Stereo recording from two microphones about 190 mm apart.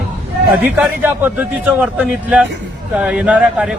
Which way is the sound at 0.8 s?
10° right (ahead or behind).